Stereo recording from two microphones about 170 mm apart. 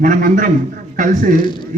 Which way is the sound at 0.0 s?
50° right (ahead or behind).